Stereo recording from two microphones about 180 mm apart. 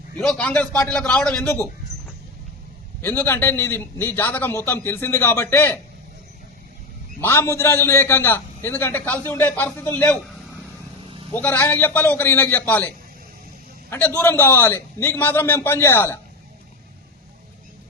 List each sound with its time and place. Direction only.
0.2 s a man's voice: 5° left (ahead or behind)
3.0 s a man's voice: 10° left (ahead or behind)
7.2 s a man's voice: 15° left (ahead or behind)
11.3 s a man's voice: 10° left (ahead or behind)
13.9 s a man's voice: 10° left (ahead or behind)